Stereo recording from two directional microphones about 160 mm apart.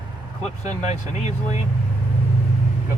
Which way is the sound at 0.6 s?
45° left (ahead or behind).